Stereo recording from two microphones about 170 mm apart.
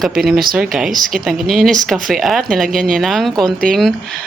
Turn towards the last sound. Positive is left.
turn(degrees=0)  # may be behind; listen again after turning